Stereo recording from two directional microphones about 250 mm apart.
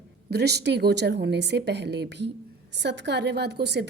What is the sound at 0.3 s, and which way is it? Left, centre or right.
A woman's voice, right.